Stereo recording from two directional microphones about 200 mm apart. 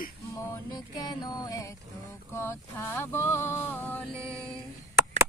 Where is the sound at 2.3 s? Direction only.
10° left (ahead or behind).